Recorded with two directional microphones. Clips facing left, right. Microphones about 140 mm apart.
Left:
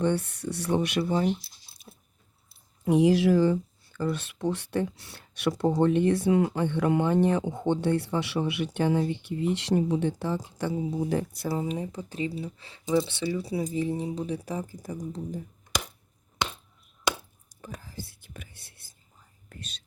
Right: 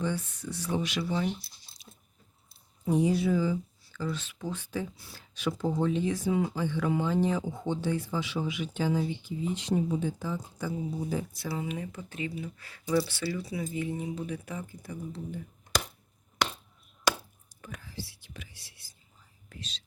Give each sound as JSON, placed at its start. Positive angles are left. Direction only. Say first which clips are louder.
{"t": 0.0, "sound": "speech", "louder": "left 6 dB", "side_deg": 65}
{"t": 1.9, "sound": "biting", "louder": "left 4 dB", "side_deg": 40}
{"t": 2.8, "sound": "speech", "louder": "left 5 dB", "side_deg": 85}
{"t": 11.4, "sound": "speech", "louder": "left 5 dB", "side_deg": 40}
{"t": 17.6, "sound": "whispering", "louder": "left 2 dB", "side_deg": 35}